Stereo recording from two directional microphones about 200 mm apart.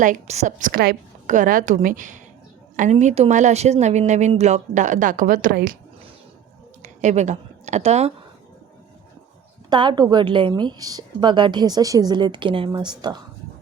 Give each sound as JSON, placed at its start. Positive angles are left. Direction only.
{"t": 0.0, "sound": "a woman's voice", "side_deg": -35}
{"t": 6.8, "sound": "a woman's voice", "side_deg": -35}
{"t": 9.6, "sound": "a woman's voice", "side_deg": -25}